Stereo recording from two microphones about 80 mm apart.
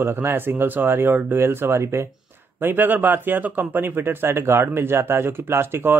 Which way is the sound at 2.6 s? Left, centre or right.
Right.